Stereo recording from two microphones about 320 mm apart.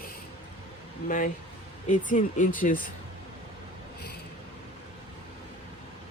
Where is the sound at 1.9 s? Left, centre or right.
Left.